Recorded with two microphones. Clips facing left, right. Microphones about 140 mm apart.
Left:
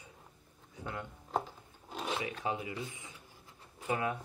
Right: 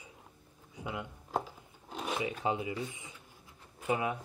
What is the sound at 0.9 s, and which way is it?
Speech, 10° right (ahead or behind).